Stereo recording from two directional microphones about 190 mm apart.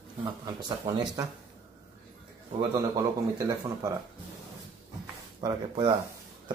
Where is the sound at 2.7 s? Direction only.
20° right (ahead or behind).